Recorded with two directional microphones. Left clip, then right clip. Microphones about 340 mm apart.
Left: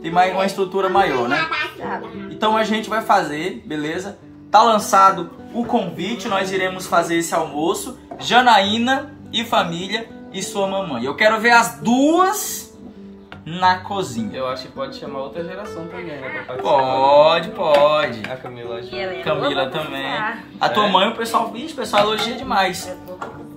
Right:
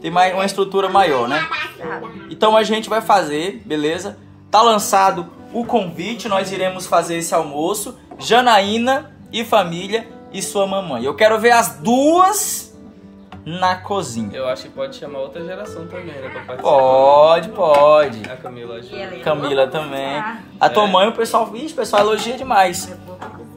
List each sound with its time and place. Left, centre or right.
0.0 s speech: centre
2.4 s speech: centre
14.4 s speech: centre
16.8 s speech: right